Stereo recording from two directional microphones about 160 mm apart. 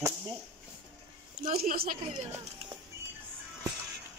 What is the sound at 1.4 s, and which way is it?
Speech, 60° right (ahead or behind).